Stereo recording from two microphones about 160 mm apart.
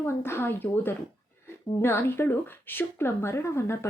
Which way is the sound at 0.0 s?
15° left (ahead or behind).